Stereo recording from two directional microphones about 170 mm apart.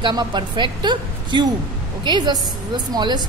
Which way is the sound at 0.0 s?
25° right (ahead or behind).